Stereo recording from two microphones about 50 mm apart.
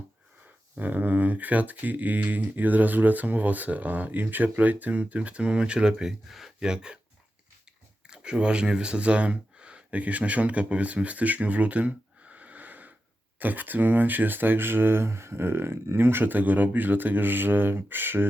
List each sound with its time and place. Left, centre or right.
0.8 s speech: right; by 7.0 s centre
8.0 s speech: centre; by 18.3 s right